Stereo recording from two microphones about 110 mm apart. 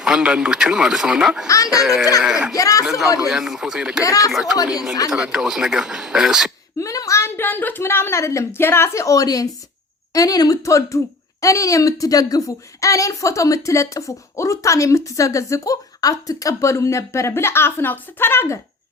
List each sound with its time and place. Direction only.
0.0 s a man's voice: 10° right (ahead or behind)
1.5 s speech: 30° left (ahead or behind)
1.8 s a man's voice: 5° right (ahead or behind)
2.6 s speech: 30° left (ahead or behind)
3.2 s a man's voice: 5° right (ahead or behind)
4.0 s speech: 30° left (ahead or behind)
4.3 s a man's voice: 5° right (ahead or behind)
4.5 s speech: 35° left (ahead or behind)
5.1 s a man's voice: 5° right (ahead or behind)
6.7 s speech: 30° left (ahead or behind)